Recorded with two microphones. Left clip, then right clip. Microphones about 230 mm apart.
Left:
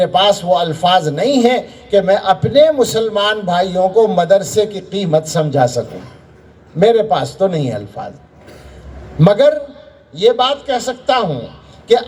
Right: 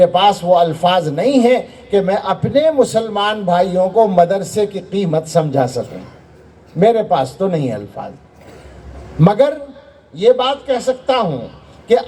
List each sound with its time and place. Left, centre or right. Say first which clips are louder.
0.0 s a man's voice: right 1 dB; left
9.1 s a man's voice: left 3 dB; left